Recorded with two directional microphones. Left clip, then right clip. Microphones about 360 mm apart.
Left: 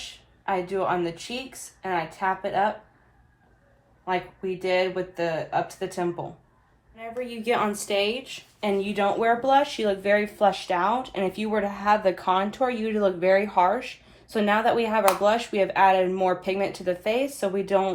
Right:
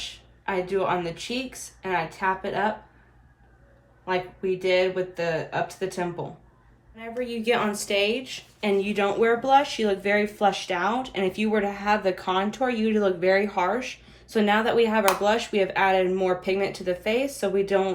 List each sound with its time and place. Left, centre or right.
0.4 s a woman's voice: centre
4.0 s a woman's voice: centre